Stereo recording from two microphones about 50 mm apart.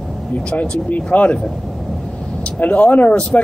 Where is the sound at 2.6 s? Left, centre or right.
Left.